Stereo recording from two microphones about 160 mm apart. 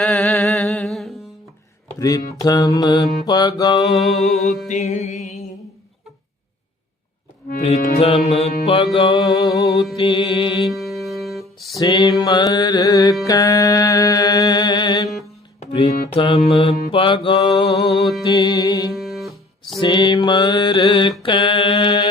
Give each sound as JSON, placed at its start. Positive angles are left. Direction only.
{"t": 0.0, "sound": "music", "side_deg": 5}
{"t": 2.0, "sound": "mantra", "side_deg": 20}
{"t": 3.9, "sound": "music", "side_deg": 0}
{"t": 4.7, "sound": "music", "side_deg": 50}
{"t": 7.6, "sound": "mantra", "side_deg": 40}
{"t": 9.3, "sound": "mantra", "side_deg": 20}
{"t": 10.7, "sound": "music", "side_deg": 0}
{"t": 11.8, "sound": "mantra", "side_deg": 25}
{"t": 15.6, "sound": "music", "side_deg": 35}
{"t": 16.1, "sound": "mantra", "side_deg": 35}
{"t": 17.8, "sound": "music", "side_deg": 0}
{"t": 18.3, "sound": "mantra", "side_deg": 25}
{"t": 18.9, "sound": "music", "side_deg": 0}
{"t": 19.8, "sound": "mantra", "side_deg": 30}